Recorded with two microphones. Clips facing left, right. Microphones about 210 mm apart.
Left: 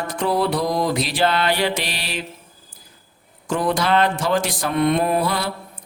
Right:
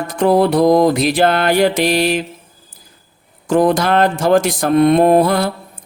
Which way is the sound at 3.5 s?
45° right (ahead or behind).